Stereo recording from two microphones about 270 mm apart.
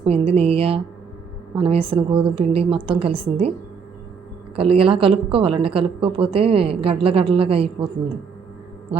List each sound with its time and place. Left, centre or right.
0.0 s speech: right
4.5 s speech: right